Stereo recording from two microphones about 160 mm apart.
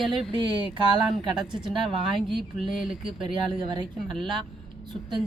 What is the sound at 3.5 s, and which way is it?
Speech, 30° right (ahead or behind).